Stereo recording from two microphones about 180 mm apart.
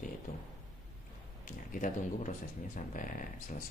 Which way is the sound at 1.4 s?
45° left (ahead or behind).